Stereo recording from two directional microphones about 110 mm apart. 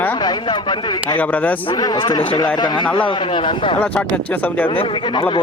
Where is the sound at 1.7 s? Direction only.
40° left (ahead or behind).